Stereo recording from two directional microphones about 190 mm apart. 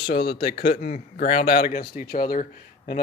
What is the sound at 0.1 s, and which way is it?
Speech, 55° left (ahead or behind).